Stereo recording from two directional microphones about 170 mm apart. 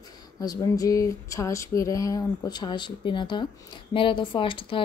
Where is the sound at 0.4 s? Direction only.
20° left (ahead or behind).